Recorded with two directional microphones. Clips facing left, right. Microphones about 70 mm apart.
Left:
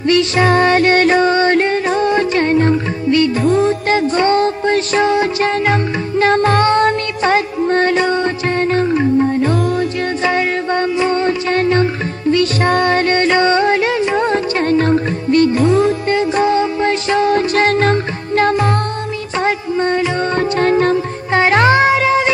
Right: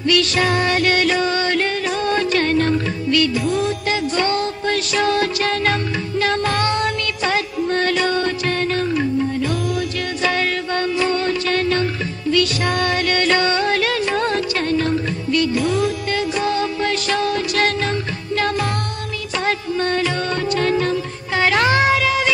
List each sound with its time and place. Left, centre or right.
0.0 s music: left
3.3 s music: left
20.3 s music: left